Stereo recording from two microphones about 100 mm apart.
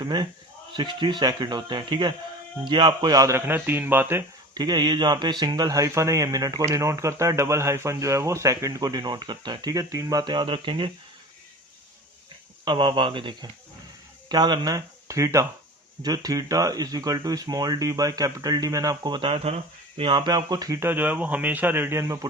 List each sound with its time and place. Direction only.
0.0 s a man's voice: 45° right (ahead or behind)
3.4 s a man's voice: 20° right (ahead or behind)
4.5 s speech: 45° right (ahead or behind); by 10.9 s 60° right (ahead or behind)
12.6 s a man's voice: 50° right (ahead or behind); by 19.5 s 75° right (ahead or behind)
20.0 s a man's voice: 50° right (ahead or behind)
20.7 s a man's voice: 20° right (ahead or behind)